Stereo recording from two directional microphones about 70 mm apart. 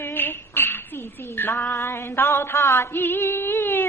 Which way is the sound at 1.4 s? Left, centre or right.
Left.